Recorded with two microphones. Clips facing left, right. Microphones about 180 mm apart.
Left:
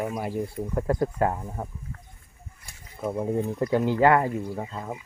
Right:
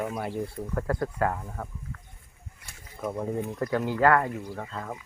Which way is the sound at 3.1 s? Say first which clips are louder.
Left 5 dB; 15° left (ahead or behind).